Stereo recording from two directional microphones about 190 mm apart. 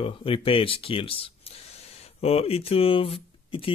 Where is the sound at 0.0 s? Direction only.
30° left (ahead or behind).